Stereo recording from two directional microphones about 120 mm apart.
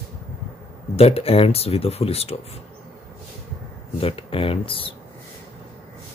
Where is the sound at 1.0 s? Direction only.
55° left (ahead or behind).